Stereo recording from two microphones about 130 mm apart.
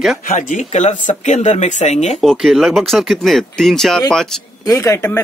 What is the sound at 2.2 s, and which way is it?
Speech, centre (ahead or behind).